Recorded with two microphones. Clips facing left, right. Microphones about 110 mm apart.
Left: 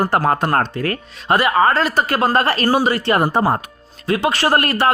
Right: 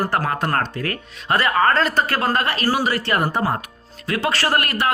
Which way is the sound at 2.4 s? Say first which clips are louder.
Left 5 dB; 35° left (ahead or behind).